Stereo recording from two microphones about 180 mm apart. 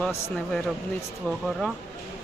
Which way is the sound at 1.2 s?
Centre (ahead or behind).